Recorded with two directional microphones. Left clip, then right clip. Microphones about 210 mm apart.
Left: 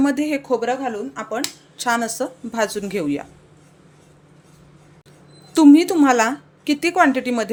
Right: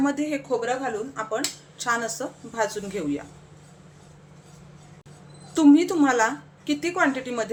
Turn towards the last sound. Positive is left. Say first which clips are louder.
# left 7 dB
turn(degrees=45)  # may be behind; listen again after turning